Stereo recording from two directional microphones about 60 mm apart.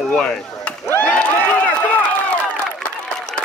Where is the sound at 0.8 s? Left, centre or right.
Left.